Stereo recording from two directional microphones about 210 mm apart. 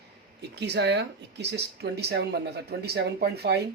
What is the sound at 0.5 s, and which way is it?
Speech, 55° right (ahead or behind).